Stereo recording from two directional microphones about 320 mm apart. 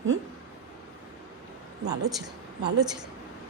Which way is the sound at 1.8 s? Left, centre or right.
Centre.